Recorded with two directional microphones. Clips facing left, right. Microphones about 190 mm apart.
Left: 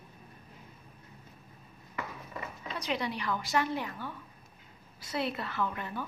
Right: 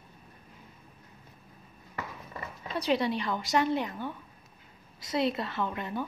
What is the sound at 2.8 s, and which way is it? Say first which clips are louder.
A woman's voice: right 7 dB; 30° right (ahead or behind).